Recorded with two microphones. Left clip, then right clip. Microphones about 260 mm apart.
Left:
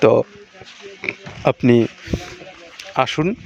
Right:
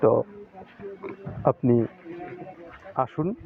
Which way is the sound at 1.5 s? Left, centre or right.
Left.